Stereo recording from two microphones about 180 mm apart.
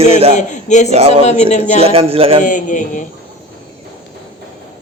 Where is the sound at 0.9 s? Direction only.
35° right (ahead or behind).